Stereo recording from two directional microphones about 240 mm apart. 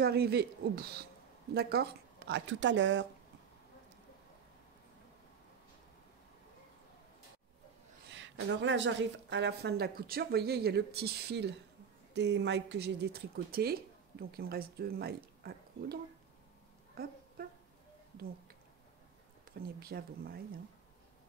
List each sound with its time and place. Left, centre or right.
0.0 s a woman's voice: right
8.1 s a woman's voice: right
16.9 s a sound: right
19.8 s a woman's voice: right